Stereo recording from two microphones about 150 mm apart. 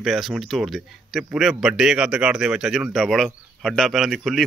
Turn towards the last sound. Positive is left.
turn(degrees=0)  # may be behind; listen again after turning